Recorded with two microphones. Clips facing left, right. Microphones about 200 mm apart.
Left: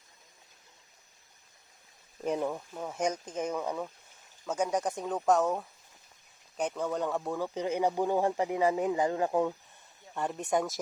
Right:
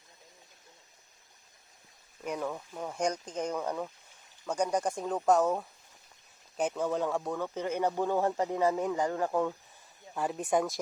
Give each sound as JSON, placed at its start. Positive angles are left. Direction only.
{"t": 2.2, "sound": "speech", "side_deg": 30}
{"t": 2.5, "sound": "speech", "side_deg": 5}
{"t": 10.2, "sound": "speech", "side_deg": -5}